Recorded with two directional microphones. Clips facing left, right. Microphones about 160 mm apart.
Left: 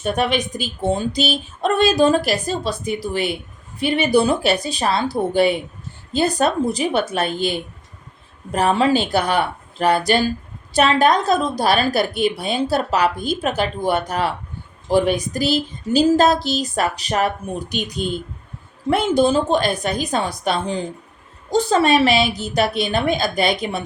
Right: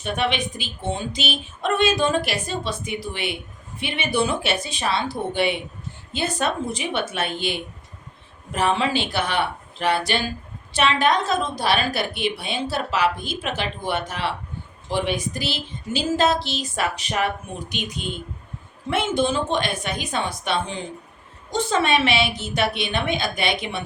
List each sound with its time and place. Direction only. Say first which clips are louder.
0.0 s speech: left 4 dB; 40° left (ahead or behind)